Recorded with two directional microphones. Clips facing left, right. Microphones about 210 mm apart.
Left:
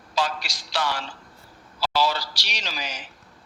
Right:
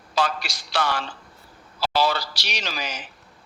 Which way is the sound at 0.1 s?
55° right (ahead or behind).